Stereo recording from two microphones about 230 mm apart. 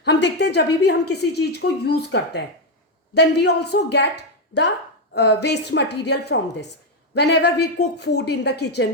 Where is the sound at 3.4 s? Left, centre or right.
Left.